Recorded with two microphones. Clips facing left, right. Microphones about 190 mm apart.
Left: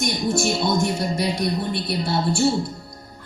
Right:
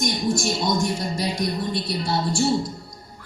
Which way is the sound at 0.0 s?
60° left (ahead or behind).